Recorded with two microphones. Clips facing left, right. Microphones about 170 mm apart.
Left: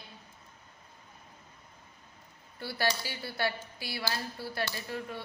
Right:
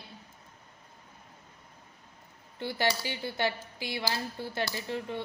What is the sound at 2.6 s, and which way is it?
A woman's voice, 20° right (ahead or behind).